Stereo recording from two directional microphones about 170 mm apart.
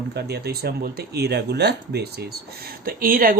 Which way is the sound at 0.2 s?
70° right (ahead or behind).